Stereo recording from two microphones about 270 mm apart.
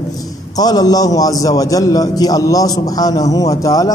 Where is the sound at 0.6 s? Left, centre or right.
Centre.